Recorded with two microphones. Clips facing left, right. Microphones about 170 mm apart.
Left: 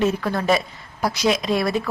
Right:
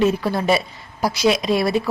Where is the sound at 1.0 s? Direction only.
10° right (ahead or behind).